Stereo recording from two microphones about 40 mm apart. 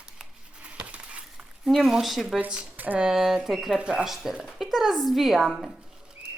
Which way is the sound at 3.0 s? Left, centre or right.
Centre.